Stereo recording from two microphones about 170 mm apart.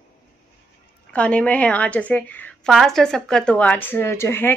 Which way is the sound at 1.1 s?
5° left (ahead or behind).